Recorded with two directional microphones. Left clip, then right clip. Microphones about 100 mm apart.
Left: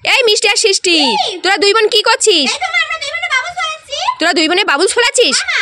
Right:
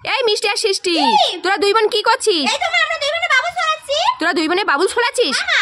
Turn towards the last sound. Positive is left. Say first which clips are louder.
# left 5 dB
turn(degrees=10)  # may be behind; listen again after turning